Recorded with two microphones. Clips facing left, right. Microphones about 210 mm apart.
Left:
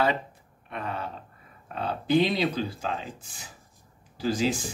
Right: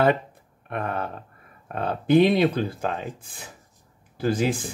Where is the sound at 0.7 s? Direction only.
55° right (ahead or behind).